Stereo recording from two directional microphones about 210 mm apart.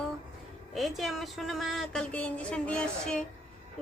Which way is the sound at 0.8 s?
Centre (ahead or behind).